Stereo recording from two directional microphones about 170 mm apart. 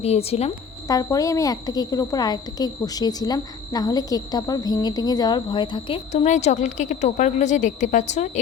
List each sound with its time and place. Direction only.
0.0 s speech: 35° left (ahead or behind)
0.9 s a woman's voice: 20° left (ahead or behind)
6.1 s a woman's voice: 45° left (ahead or behind)